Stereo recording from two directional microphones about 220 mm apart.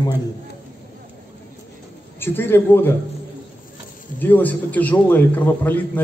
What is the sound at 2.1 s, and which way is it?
Speech, 10° left (ahead or behind).